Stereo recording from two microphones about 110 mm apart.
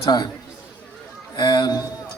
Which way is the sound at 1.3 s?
40° left (ahead or behind).